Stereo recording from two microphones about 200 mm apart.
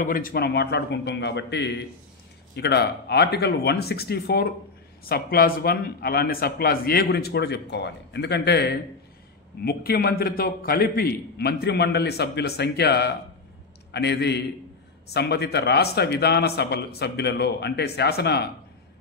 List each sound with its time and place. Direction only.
0.0 s a man's voice: 45° left (ahead or behind)